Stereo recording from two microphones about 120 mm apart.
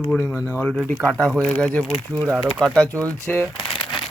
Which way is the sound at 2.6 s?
5° left (ahead or behind).